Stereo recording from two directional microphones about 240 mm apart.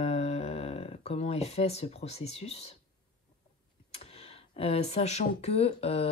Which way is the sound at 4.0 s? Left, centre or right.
Left.